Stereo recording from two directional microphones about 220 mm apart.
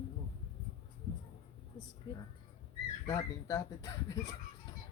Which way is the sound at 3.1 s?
15° left (ahead or behind).